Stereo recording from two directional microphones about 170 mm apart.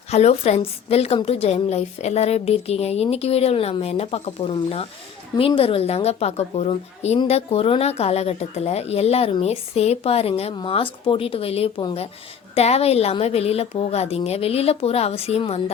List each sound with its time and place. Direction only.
0.1 s speech: 40° left (ahead or behind)